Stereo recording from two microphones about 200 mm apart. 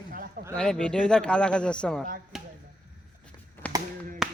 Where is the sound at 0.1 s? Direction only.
45° right (ahead or behind).